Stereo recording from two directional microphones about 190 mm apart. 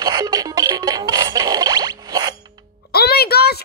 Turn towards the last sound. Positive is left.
turn(degrees=55)  # may be behind; listen again after turning